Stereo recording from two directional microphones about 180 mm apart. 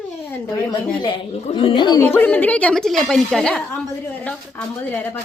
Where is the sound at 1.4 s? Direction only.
35° left (ahead or behind).